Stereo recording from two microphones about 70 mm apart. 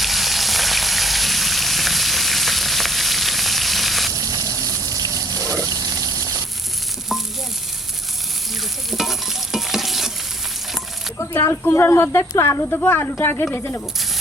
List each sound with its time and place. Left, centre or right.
0.0 s frying: centre
4.1 s water: right
8.9 s stir: centre
11.6 s speech: left